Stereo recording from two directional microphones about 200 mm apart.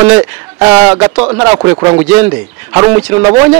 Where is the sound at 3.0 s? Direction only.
15° right (ahead or behind).